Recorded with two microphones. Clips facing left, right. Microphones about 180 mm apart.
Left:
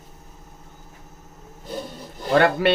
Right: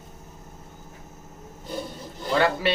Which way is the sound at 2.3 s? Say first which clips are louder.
Left 5 dB; 55° left (ahead or behind).